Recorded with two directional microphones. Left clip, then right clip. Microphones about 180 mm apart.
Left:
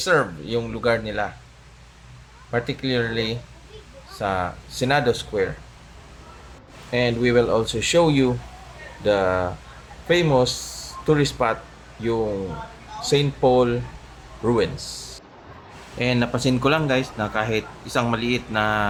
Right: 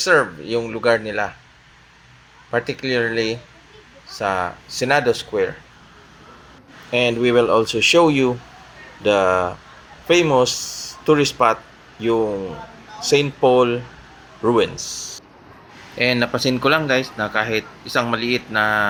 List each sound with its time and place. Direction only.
0.0 s speech: 15° right (ahead or behind)
2.5 s speech: 15° right (ahead or behind)
6.9 s speech: 15° right (ahead or behind)
10.7 s a sound: 5° left (ahead or behind)
11.0 s speech: 15° right (ahead or behind)
13.1 s speech: 15° right (ahead or behind)
16.0 s speech: 10° right (ahead or behind)